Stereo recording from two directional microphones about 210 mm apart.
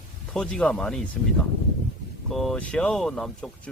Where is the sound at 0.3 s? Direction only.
5° left (ahead or behind).